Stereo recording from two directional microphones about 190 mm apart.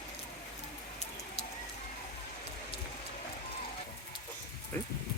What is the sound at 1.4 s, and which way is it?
Bird, 35° left (ahead or behind).